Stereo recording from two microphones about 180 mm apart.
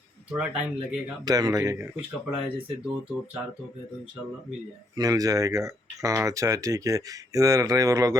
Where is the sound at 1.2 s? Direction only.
20° right (ahead or behind).